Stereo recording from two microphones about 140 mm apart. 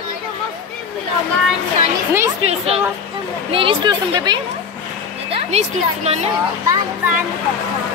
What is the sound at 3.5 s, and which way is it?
Speech, 35° right (ahead or behind).